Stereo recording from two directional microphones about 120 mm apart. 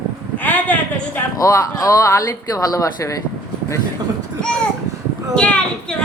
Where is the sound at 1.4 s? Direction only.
30° left (ahead or behind).